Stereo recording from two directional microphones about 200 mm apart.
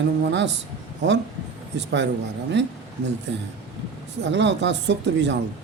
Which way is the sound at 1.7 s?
65° right (ahead or behind).